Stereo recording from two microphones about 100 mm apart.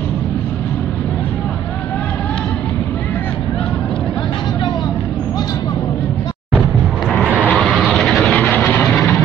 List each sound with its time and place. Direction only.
7.2 s vehicle: 15° right (ahead or behind)
7.7 s vehicle: centre (ahead or behind)
8.5 s vehicle: 15° left (ahead or behind)
8.8 s vehicle: 5° left (ahead or behind)